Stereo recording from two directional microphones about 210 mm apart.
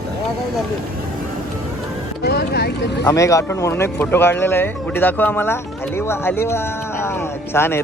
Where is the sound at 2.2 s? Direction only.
50° left (ahead or behind).